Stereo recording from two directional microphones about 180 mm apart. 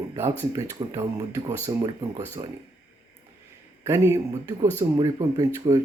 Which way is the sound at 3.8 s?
15° right (ahead or behind).